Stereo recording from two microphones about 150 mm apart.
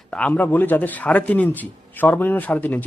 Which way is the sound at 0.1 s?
10° left (ahead or behind).